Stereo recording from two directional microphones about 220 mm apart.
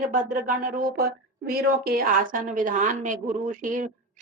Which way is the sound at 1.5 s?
40° right (ahead or behind).